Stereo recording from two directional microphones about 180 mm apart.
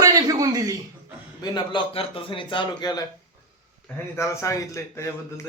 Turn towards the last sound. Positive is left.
turn(degrees=15)  # may be behind; listen again after turning